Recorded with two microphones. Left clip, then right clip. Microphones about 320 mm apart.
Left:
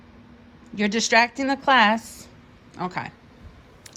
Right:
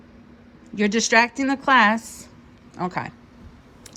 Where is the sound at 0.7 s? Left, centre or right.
Centre.